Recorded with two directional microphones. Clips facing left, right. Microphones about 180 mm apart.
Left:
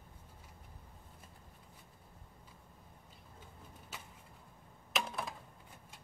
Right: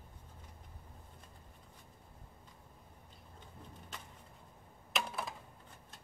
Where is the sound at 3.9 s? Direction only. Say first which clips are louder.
Even; 5° left (ahead or behind).